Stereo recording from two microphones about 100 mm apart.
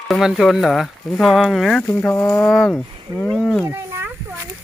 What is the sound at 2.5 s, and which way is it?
Speech, 5° left (ahead or behind).